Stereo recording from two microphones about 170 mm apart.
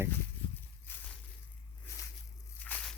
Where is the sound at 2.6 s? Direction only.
10° left (ahead or behind).